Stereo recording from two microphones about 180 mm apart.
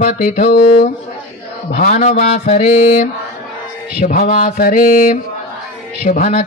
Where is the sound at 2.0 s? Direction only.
40° left (ahead or behind).